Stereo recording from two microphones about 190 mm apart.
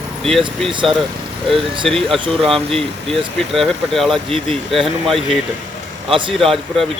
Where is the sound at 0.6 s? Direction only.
Centre (ahead or behind).